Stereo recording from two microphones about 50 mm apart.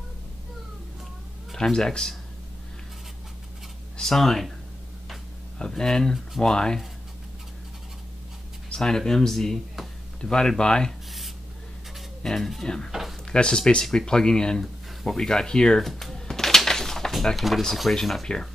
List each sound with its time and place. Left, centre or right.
1.5 s speech: centre
4.0 s speech: centre
5.6 s speech: centre
8.7 s speech: centre
12.2 s speech: centre
15.8 s a sound: centre
17.6 s speech: centre